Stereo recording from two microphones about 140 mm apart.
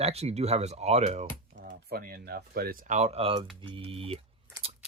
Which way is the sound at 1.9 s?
90° right.